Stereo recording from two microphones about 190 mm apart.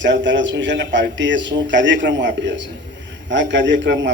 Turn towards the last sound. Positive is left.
turn(degrees=-70)  # may be behind; listen again after turning